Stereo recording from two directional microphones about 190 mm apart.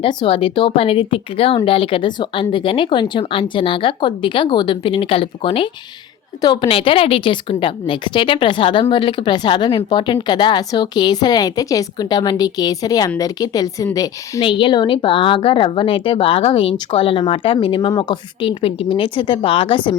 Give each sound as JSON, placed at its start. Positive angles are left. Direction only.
{"t": 0.0, "sound": "a woman's voice", "side_deg": 25}